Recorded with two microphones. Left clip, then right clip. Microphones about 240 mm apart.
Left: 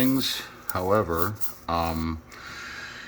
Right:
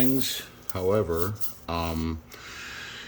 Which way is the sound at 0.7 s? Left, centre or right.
Centre.